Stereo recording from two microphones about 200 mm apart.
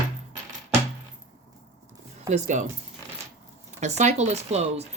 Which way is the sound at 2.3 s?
40° right (ahead or behind).